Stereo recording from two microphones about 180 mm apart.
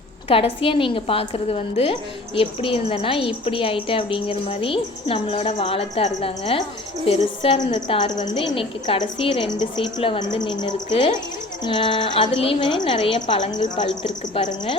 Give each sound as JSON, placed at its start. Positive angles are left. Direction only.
{"t": 0.3, "sound": "a woman's voice", "side_deg": 30}